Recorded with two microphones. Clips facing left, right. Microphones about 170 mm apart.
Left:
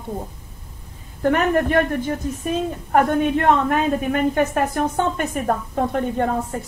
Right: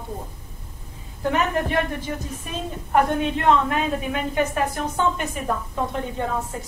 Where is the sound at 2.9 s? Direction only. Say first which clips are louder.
Left 3 dB; 50° left (ahead or behind).